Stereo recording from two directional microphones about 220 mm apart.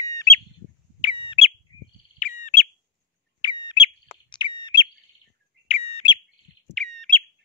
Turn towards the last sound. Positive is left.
turn(degrees=0)  # may be behind; listen again after turning